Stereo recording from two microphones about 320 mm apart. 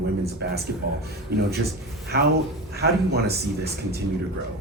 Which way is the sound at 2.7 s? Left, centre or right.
Right.